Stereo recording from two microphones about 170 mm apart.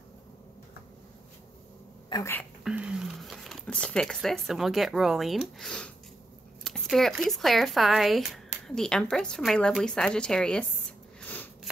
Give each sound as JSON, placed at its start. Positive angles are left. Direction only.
{"t": 2.1, "sound": "a woman's voice", "side_deg": 25}
{"t": 2.6, "sound": "speech", "side_deg": -5}
{"t": 11.1, "sound": "a sound", "side_deg": 10}